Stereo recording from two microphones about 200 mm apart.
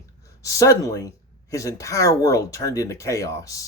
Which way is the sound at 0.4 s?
15° left (ahead or behind).